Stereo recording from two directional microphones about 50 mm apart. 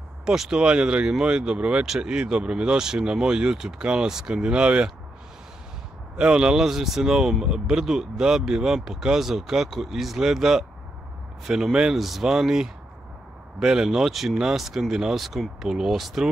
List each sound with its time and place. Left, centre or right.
0.2 s speech: centre
6.1 s speech: centre